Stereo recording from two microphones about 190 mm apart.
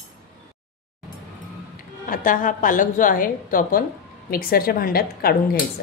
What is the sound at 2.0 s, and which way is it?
A woman's voice, 45° left (ahead or behind).